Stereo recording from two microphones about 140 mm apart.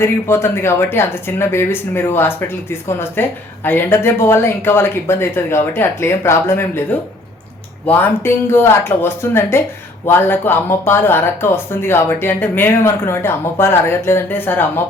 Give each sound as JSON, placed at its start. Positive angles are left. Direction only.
{"t": 0.0, "sound": "speech", "side_deg": 15}
{"t": 7.9, "sound": "speech", "side_deg": 15}